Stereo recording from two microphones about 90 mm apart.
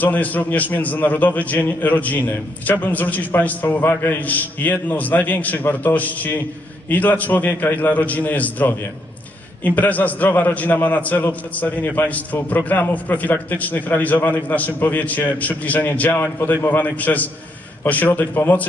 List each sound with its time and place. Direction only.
0.0 s a man's voice: 20° left (ahead or behind)